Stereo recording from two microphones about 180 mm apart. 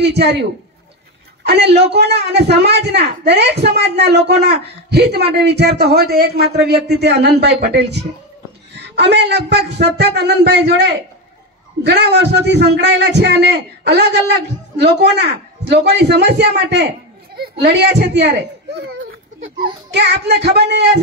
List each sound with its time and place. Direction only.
0.0 s a man's voice: 70° right (ahead or behind)
19.6 s a man's voice: 70° right (ahead or behind)